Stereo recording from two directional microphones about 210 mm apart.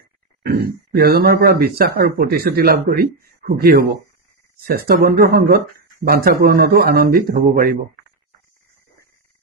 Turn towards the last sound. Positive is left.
turn(degrees=-45)  # may be behind; listen again after turning